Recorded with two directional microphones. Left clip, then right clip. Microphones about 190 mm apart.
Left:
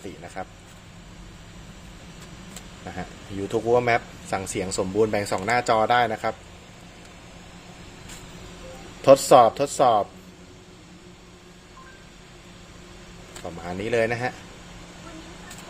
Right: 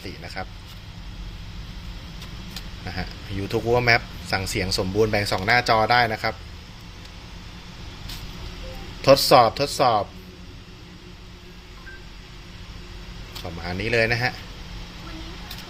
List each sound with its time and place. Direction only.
0.2 s speech: 10° left (ahead or behind)
2.8 s speech: 15° left (ahead or behind)
9.0 s speech: 20° left (ahead or behind)
13.6 s speech: 15° left (ahead or behind)